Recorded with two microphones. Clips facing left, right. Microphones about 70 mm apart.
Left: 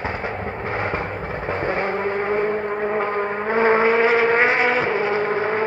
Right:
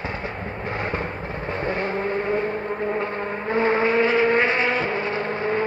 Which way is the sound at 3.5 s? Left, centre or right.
Left.